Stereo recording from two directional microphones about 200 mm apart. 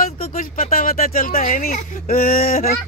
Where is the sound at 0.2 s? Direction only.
40° left (ahead or behind).